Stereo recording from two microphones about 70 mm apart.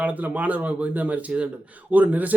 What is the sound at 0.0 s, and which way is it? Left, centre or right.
Speech, right.